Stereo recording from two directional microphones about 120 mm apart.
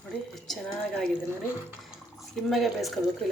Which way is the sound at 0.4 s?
Centre (ahead or behind).